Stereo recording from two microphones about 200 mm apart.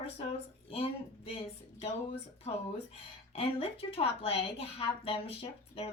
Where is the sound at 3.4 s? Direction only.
30° left (ahead or behind).